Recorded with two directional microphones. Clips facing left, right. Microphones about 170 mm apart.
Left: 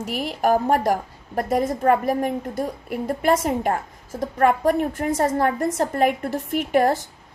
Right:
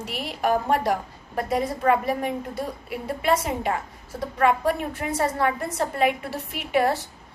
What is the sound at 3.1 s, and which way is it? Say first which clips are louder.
A woman's voice: left 3 dB; 50° left (ahead or behind).